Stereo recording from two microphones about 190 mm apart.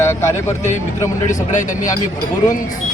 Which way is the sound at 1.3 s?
40° left (ahead or behind).